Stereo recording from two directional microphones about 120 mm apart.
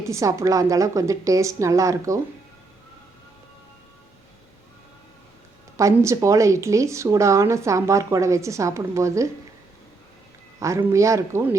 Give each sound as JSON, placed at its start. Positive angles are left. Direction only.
{"t": 0.0, "sound": "speech", "side_deg": -25}
{"t": 5.7, "sound": "speech", "side_deg": -25}
{"t": 10.6, "sound": "speech", "side_deg": -25}